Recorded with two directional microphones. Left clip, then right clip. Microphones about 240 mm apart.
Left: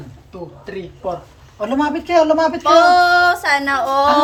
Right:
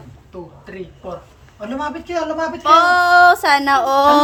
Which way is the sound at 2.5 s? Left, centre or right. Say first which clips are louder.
Right 1 dB; centre.